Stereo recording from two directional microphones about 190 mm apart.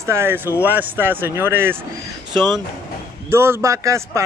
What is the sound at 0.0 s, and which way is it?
A man's voice, 15° right (ahead or behind).